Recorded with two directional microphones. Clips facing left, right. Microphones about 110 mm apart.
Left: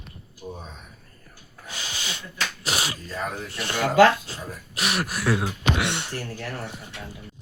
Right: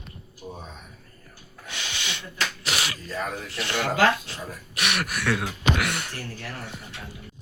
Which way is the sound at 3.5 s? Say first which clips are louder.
Even; 45° left (ahead or behind).